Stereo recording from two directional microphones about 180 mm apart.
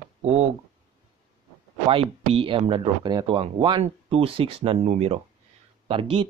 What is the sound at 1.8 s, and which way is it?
Speech, 30° right (ahead or behind).